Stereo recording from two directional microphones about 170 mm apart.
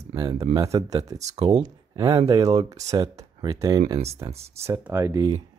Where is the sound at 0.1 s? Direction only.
25° right (ahead or behind).